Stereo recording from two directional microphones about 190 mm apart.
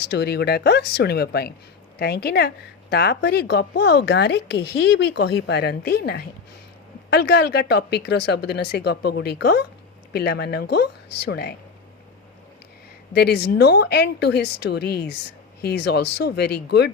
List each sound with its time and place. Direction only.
0.0 s speech: 60° left (ahead or behind)
13.1 s speech: 60° left (ahead or behind)